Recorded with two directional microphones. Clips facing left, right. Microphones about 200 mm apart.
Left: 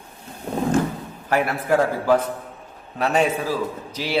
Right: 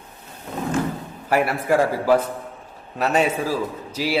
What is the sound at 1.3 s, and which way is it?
A man's voice, 5° right (ahead or behind).